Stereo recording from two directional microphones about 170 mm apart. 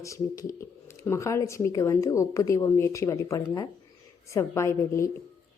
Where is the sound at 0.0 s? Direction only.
20° left (ahead or behind).